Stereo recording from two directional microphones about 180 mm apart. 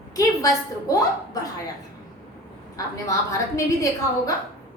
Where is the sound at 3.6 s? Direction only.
20° left (ahead or behind).